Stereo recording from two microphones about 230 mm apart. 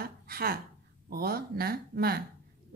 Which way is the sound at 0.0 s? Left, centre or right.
Right.